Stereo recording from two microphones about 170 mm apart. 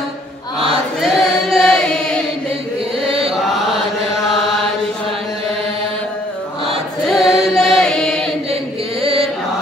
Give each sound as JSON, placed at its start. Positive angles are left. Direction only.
{"t": 1.0, "sound": "singing", "side_deg": 0}
{"t": 3.1, "sound": "chant", "side_deg": -35}
{"t": 7.1, "sound": "chant", "side_deg": 0}
{"t": 9.0, "sound": "chant", "side_deg": -35}